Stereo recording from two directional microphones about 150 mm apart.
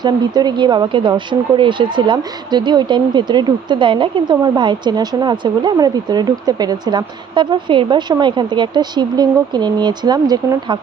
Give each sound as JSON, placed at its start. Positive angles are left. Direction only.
{"t": 0.0, "sound": "speech", "side_deg": -30}